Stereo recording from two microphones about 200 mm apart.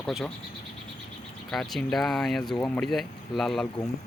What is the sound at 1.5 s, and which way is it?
Speech, centre (ahead or behind).